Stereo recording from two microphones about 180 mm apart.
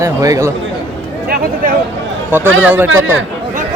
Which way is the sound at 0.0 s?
20° right (ahead or behind).